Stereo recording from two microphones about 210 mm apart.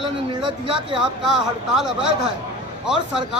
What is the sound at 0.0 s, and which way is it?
Speech, 25° right (ahead or behind).